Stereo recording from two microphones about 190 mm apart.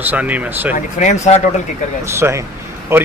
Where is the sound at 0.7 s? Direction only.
40° left (ahead or behind).